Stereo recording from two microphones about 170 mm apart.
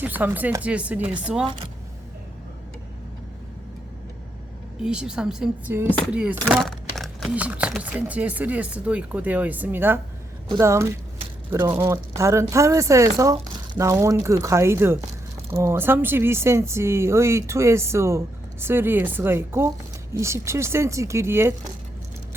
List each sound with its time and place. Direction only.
0.0 s speech: 10° right (ahead or behind)
4.8 s a woman's voice: 5° right (ahead or behind)